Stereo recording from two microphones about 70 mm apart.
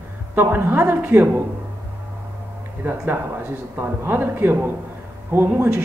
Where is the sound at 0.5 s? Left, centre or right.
Right.